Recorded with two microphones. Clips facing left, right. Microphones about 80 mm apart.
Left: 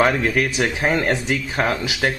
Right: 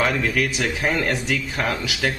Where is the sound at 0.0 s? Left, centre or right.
Left.